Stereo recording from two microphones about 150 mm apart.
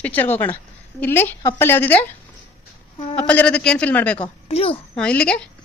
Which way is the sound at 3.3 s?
10° left (ahead or behind).